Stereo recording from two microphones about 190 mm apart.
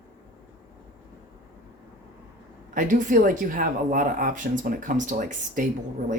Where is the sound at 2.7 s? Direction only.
45° right (ahead or behind).